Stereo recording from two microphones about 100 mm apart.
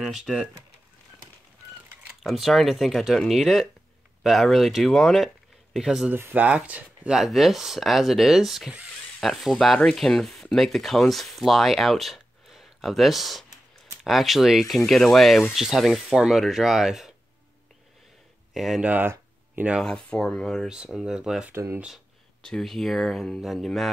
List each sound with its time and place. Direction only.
0.0 s speech: 5° right (ahead or behind)
2.2 s speech: centre (ahead or behind)
6.1 s speech: 20° right (ahead or behind); by 17.1 s 5° right (ahead or behind)
18.5 s speech: centre (ahead or behind)
18.8 s a sound: 15° right (ahead or behind)
19.8 s speech: 5° left (ahead or behind)
20.6 s speech: 10° right (ahead or behind)
22.4 s speech: 5° left (ahead or behind)